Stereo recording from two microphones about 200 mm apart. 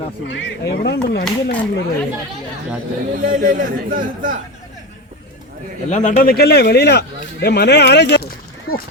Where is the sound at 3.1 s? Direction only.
40° right (ahead or behind).